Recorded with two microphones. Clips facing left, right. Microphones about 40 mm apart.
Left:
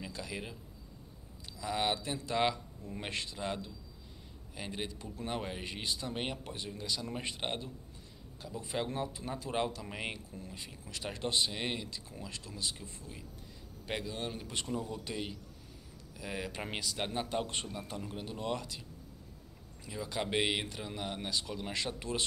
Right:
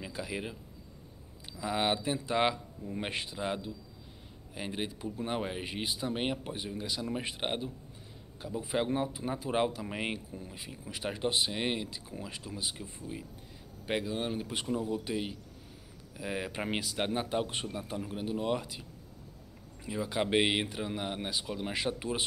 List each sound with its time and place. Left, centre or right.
0.0 s speech: centre
1.6 s speech: centre